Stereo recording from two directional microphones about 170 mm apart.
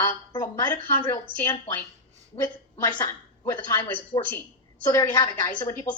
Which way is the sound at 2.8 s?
20° left (ahead or behind).